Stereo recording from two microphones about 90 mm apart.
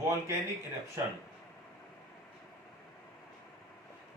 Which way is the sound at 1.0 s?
35° right (ahead or behind).